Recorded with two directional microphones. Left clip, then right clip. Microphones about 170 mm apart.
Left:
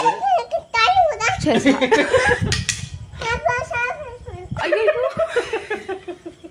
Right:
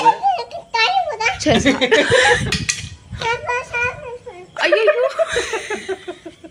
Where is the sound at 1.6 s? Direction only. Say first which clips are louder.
Right 1 dB; 20° right (ahead or behind).